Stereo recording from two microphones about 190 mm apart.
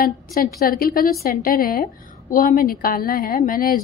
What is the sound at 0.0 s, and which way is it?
A woman's voice, 50° left (ahead or behind).